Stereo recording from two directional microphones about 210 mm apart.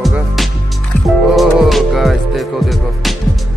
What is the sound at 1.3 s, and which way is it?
Music, centre (ahead or behind).